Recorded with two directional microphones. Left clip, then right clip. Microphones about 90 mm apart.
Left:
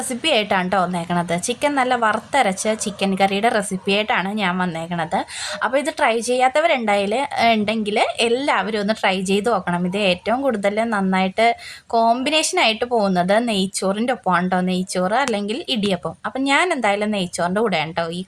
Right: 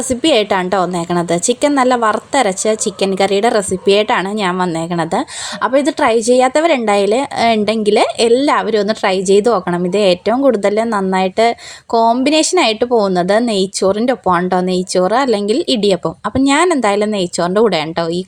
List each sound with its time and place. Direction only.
0.1 s a woman's voice: 45° right (ahead or behind)
5.6 s a woman's voice: 35° right (ahead or behind)